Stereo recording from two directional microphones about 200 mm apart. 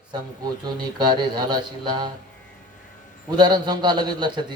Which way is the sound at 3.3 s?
20° right (ahead or behind).